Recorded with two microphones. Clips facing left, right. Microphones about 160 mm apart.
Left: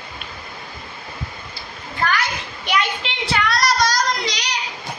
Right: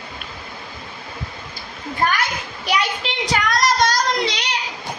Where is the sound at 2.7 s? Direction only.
40° right (ahead or behind).